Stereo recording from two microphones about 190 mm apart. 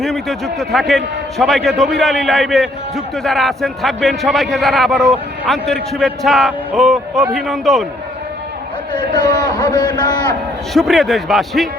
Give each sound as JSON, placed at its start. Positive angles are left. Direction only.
{"t": 0.0, "sound": "a man's voice", "side_deg": 0}
{"t": 8.9, "sound": "a man's voice", "side_deg": 25}
{"t": 10.8, "sound": "a man's voice", "side_deg": 0}